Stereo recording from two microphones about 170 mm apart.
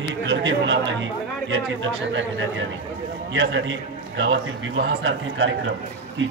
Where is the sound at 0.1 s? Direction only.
90° right.